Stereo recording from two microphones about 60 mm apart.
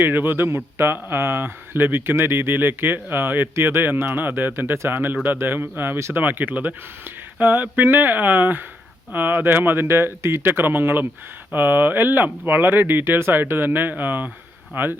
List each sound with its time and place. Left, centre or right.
0.0 s speech: right
6.0 s speech: right
6.2 s speech: right